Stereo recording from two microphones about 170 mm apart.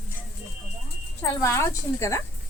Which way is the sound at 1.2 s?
15° left (ahead or behind).